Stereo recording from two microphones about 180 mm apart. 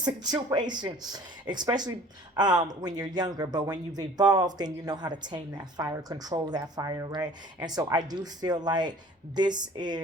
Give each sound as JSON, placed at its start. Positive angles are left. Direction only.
{"t": 0.0, "sound": "speech", "side_deg": -25}